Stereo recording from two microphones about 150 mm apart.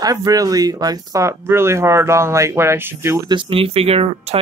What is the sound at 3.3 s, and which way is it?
Speech, 35° right (ahead or behind).